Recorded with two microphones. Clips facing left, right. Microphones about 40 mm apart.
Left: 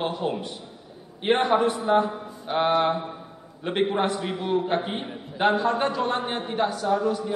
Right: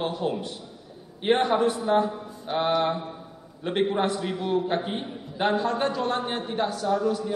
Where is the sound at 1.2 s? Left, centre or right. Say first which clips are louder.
Left 1 dB; centre.